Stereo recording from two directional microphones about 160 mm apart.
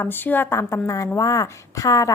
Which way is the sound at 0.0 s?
10° left (ahead or behind).